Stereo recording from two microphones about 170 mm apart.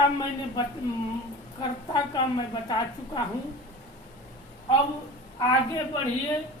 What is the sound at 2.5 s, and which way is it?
Speech, 25° left (ahead or behind).